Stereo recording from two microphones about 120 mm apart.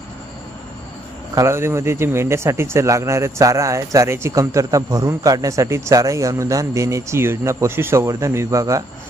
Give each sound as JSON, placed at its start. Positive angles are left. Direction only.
{"t": 1.4, "sound": "speech", "side_deg": -20}